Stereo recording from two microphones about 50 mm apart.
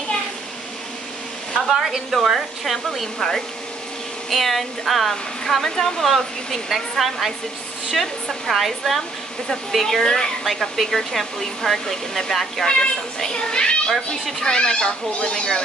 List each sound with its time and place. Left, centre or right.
1.7 s speech: centre
4.3 s speech: centre
13.2 s speech: centre